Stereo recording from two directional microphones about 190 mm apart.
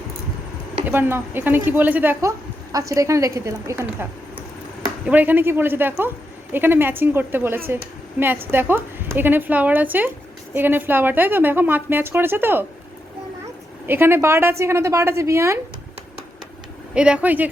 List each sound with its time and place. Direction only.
0.9 s a woman's voice: 10° right (ahead or behind)
13.8 s a woman's voice: 10° right (ahead or behind)
16.9 s a woman's voice: 5° right (ahead or behind)